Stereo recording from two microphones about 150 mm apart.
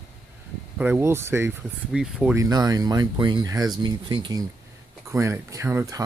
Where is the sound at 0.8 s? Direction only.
15° right (ahead or behind).